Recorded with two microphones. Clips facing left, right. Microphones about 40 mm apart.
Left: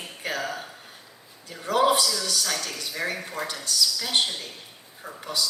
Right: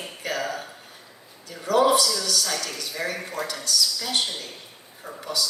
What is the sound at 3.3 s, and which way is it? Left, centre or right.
Speech, left.